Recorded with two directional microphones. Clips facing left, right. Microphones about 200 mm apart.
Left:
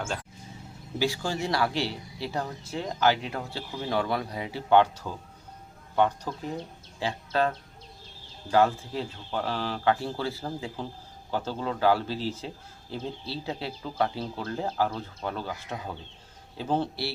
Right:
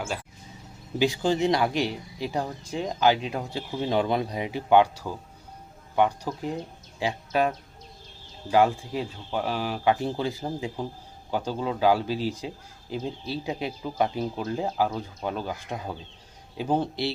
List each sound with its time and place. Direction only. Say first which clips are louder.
0.0 s speech: right 1 dB; 10° right (ahead or behind)
0.9 s speech: right 5 dB; 20° right (ahead or behind)
16.6 s speech: right 2 dB; 15° right (ahead or behind)